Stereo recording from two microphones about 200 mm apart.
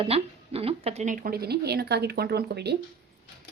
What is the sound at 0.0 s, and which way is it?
Speech, 30° right (ahead or behind).